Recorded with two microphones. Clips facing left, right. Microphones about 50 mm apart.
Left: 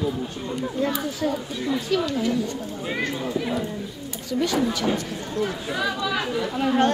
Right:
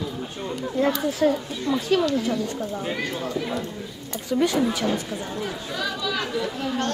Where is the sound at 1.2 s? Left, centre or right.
Right.